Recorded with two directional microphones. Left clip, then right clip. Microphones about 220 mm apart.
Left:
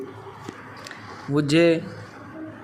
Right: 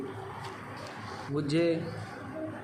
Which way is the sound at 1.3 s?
40° left (ahead or behind).